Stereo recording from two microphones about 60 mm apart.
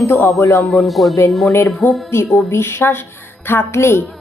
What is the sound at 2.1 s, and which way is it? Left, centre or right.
Speech, left.